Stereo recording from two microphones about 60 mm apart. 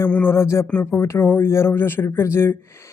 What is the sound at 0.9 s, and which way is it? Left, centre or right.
Speech, left.